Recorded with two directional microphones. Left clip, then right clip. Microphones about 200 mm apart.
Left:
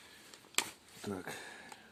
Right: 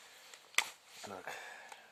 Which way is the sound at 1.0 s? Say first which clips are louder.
Left 2 dB; 30° right (ahead or behind).